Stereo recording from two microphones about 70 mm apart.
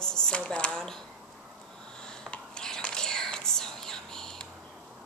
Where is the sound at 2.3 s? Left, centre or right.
Centre.